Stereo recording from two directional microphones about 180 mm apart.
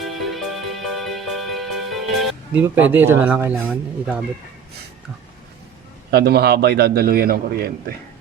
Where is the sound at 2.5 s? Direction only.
10° right (ahead or behind).